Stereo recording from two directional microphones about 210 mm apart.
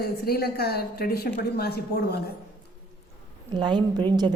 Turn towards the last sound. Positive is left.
turn(degrees=-20)  # may be behind; listen again after turning